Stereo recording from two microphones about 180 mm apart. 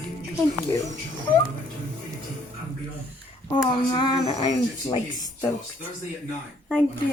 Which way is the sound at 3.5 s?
25° left (ahead or behind).